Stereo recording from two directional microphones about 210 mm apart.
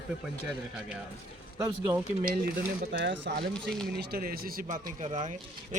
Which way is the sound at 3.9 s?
45° right (ahead or behind).